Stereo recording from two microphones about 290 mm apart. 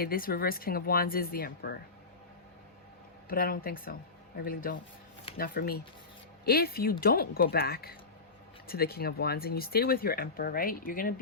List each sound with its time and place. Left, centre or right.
0.0 s speech: left
3.2 s a man's voice: left